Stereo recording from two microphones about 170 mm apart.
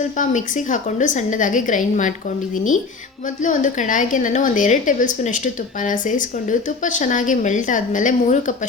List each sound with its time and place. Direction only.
0.2 s speech: 50° left (ahead or behind)
3.4 s speech: 50° left (ahead or behind)